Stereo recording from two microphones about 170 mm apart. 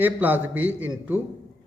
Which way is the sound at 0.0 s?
10° right (ahead or behind).